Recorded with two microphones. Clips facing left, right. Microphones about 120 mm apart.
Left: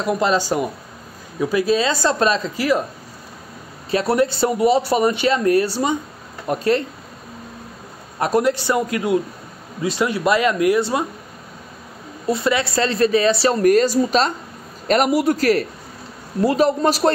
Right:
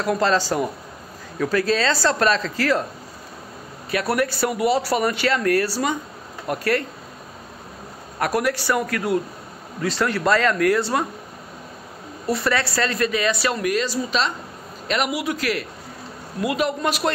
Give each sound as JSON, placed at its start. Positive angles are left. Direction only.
{"t": 0.0, "sound": "speech", "side_deg": 20}
{"t": 3.9, "sound": "speech", "side_deg": 25}
{"t": 8.2, "sound": "speech", "side_deg": 25}
{"t": 12.3, "sound": "a woman's voice", "side_deg": 20}